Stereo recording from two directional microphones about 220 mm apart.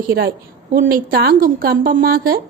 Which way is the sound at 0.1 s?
40° right (ahead or behind).